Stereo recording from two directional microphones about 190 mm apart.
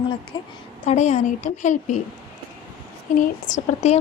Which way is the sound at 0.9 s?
35° left (ahead or behind).